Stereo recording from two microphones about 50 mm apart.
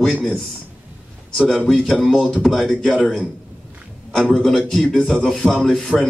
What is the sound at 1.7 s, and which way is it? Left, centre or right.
Speech, centre.